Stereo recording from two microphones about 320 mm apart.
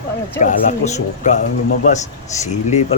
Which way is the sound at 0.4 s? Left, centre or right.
Left.